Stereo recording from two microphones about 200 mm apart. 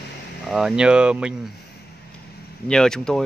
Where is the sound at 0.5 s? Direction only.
Centre (ahead or behind).